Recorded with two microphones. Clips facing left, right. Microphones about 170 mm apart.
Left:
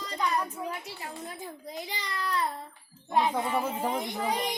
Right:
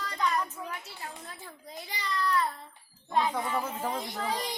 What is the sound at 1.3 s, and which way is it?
A child's voice, 15° left (ahead or behind).